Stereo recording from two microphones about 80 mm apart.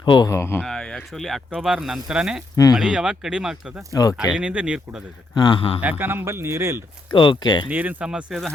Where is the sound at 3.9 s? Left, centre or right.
Left.